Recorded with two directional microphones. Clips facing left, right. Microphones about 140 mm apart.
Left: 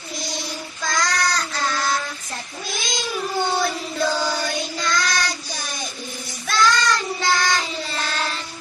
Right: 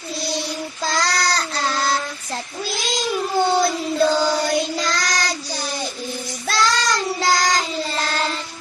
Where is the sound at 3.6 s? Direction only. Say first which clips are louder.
Right 5 dB; 35° right (ahead or behind).